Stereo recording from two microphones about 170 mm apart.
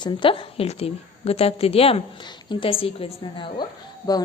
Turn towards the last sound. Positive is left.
turn(degrees=25)  # may be behind; listen again after turning